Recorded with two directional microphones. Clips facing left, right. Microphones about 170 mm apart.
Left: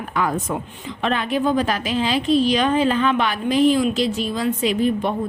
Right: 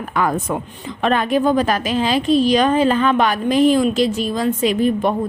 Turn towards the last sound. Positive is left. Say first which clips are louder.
# right 3 dB
turn(degrees=-45)  # may be behind; listen again after turning